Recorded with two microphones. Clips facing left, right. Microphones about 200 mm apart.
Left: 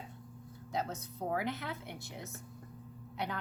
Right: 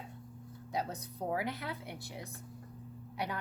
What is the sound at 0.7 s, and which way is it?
A woman's voice, 15° right (ahead or behind).